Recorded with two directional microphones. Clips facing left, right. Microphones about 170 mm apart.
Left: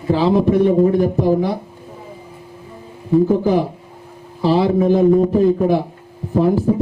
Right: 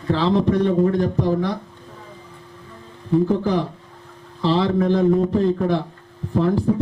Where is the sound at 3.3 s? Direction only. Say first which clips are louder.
Left 5 dB; 10° left (ahead or behind).